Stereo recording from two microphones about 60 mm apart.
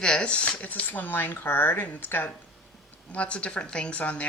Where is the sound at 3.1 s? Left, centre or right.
Left.